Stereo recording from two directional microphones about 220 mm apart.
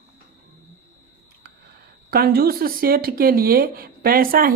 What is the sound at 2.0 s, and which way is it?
Speech, 45° right (ahead or behind).